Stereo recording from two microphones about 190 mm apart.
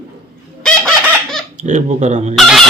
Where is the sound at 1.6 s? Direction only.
40° right (ahead or behind).